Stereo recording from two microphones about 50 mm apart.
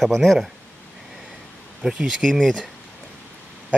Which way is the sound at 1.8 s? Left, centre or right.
Centre.